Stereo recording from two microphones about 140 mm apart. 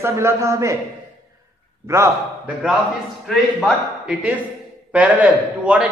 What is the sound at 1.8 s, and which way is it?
Speech, 20° right (ahead or behind).